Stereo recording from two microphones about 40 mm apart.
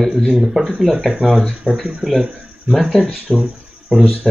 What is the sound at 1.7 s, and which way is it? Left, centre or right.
Speech, right.